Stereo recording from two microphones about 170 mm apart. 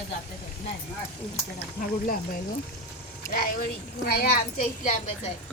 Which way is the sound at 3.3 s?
60° left (ahead or behind).